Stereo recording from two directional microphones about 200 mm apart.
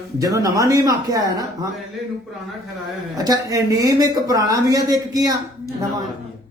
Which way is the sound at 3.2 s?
20° right (ahead or behind).